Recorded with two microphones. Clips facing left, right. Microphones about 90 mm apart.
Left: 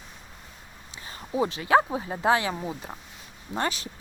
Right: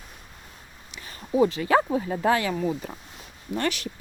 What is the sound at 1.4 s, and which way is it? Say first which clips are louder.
Speech: right 1 dB; 15° left (ahead or behind).